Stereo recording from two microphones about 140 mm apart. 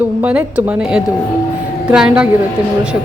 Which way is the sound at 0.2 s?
10° right (ahead or behind).